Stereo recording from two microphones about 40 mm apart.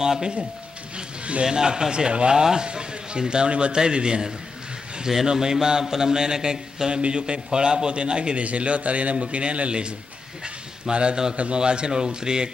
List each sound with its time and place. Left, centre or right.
0.0 s speech: centre
0.9 s a man's voice: right